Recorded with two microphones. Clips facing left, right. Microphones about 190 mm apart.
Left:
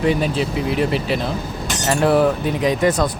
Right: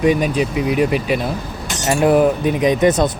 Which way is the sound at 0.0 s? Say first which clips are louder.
Right 3 dB; 15° right (ahead or behind).